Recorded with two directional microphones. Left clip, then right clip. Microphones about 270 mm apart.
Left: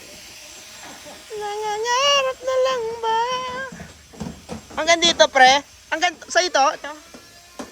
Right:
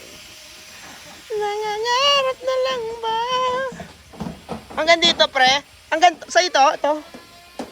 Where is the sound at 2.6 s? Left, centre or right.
Centre.